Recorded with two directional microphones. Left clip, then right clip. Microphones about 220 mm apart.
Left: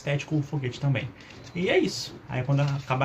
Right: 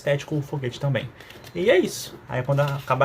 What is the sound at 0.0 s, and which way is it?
Speech, 55° right (ahead or behind).